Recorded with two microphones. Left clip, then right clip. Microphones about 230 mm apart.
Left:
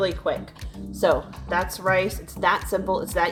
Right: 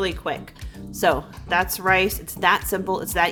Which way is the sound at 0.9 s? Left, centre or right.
Right.